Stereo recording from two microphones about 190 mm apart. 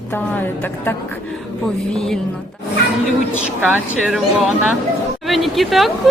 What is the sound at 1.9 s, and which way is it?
Speech, 5° left (ahead or behind).